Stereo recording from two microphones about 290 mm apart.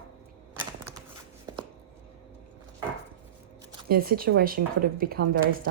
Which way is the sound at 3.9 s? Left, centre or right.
Right.